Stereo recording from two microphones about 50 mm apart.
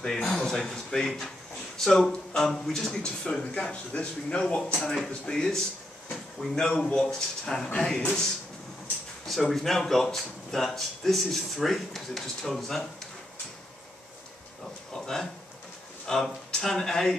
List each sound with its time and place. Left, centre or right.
0.0 s a man's voice: centre
4.7 s speech: centre
9.2 s speech: centre
14.9 s a sound: centre
16.1 s speech: centre